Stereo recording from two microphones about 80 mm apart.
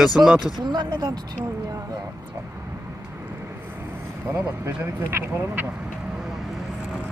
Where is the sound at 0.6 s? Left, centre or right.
Right.